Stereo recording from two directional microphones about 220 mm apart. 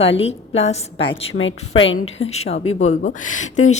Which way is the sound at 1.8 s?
60° left (ahead or behind).